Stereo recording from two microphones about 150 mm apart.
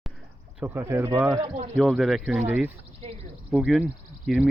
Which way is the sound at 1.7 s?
Centre (ahead or behind).